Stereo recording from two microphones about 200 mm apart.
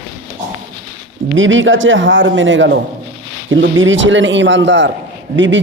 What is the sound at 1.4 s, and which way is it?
A man's voice, 75° right (ahead or behind).